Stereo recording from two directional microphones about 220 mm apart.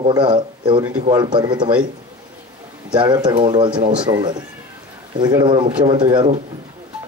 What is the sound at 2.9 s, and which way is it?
A man's voice, 20° right (ahead or behind).